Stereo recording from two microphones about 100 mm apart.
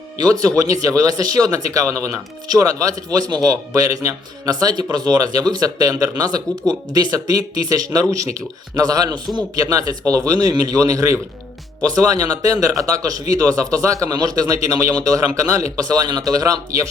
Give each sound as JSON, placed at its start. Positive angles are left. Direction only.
{"t": 0.2, "sound": "speech", "side_deg": -40}